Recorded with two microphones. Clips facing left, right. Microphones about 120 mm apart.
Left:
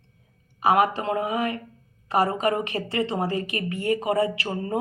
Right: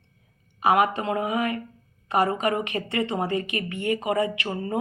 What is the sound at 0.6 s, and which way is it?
A woman's voice, 30° left (ahead or behind).